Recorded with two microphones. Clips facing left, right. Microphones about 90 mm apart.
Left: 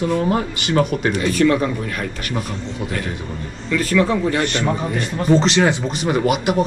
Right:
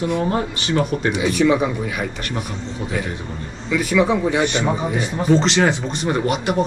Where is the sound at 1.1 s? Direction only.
10° right (ahead or behind).